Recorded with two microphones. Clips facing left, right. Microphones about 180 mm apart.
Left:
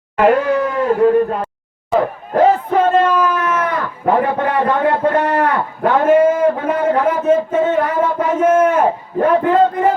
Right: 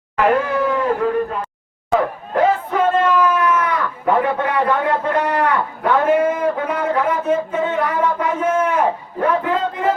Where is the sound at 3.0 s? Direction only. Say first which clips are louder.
Left 1 dB; 40° left (ahead or behind).